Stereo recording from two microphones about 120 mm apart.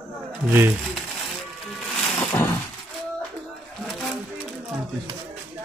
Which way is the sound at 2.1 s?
15° left (ahead or behind).